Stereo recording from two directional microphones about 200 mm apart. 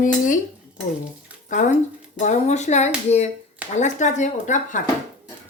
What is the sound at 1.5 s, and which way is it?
A woman's voice, 40° left (ahead or behind).